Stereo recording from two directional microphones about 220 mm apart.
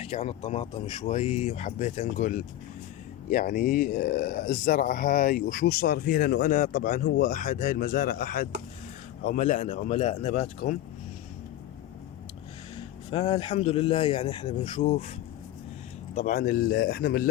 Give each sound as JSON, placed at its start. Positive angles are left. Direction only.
{"t": 0.0, "sound": "speech", "side_deg": 25}
{"t": 12.7, "sound": "speech", "side_deg": 25}
{"t": 16.1, "sound": "speech", "side_deg": 35}